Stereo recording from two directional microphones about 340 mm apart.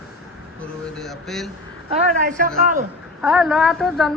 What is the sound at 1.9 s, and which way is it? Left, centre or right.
Speech, right.